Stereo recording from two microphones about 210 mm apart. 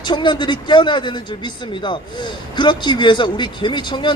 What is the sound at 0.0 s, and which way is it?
A man's voice, 20° left (ahead or behind).